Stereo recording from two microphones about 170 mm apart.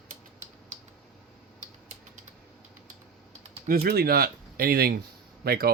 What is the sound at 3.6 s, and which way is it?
Speech, 60° right (ahead or behind).